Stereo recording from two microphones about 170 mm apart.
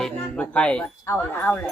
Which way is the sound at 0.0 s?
5° left (ahead or behind).